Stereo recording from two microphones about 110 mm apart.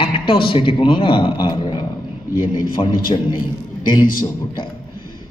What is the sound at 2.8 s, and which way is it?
Speech, 50° left (ahead or behind).